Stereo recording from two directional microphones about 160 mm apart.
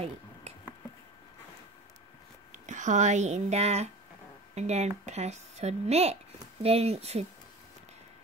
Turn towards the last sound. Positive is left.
turn(degrees=-40)  # may be behind; listen again after turning